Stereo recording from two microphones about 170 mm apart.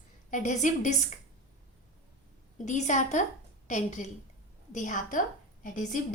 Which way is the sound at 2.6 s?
45° left (ahead or behind).